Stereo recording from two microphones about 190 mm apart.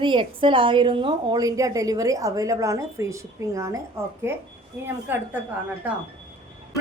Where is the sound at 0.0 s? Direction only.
25° right (ahead or behind); by 5.2 s 10° right (ahead or behind).